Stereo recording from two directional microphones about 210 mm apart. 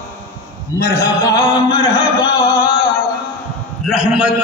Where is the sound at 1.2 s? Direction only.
15° left (ahead or behind).